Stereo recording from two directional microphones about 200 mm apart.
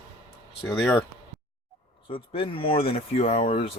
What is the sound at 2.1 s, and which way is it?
Speech, 25° left (ahead or behind).